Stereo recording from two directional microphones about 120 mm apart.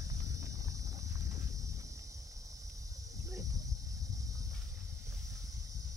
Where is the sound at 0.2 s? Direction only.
25° right (ahead or behind).